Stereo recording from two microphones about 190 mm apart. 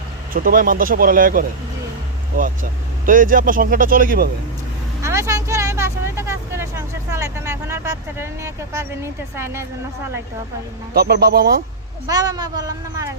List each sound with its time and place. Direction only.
0.3 s speech: 45° right (ahead or behind)
3.1 s speech: 45° right (ahead or behind)
5.0 s speech: 15° right (ahead or behind)
10.9 s speech: 55° right (ahead or behind)
12.0 s speech: 20° right (ahead or behind)